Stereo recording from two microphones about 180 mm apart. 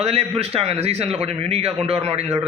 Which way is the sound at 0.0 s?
35° right (ahead or behind).